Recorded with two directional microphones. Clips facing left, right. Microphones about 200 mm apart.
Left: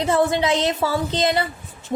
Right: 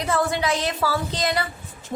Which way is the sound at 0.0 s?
25° left (ahead or behind).